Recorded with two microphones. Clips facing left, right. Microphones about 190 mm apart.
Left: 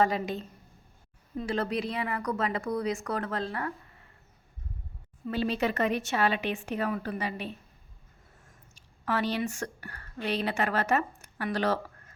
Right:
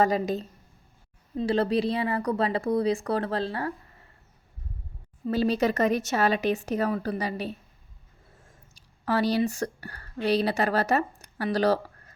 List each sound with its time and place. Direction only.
0.0 s a woman's voice: 40° right (ahead or behind)
5.2 s a woman's voice: 40° right (ahead or behind)
8.7 s speech: 35° right (ahead or behind)